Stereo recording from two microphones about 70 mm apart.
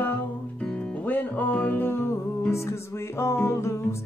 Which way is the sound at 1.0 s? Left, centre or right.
Left.